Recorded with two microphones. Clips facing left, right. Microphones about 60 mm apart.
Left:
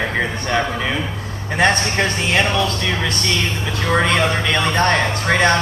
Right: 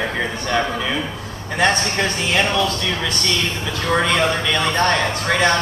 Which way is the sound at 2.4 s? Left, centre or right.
Centre.